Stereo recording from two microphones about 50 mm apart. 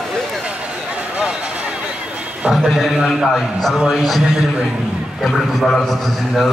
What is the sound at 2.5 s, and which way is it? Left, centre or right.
Speech, centre.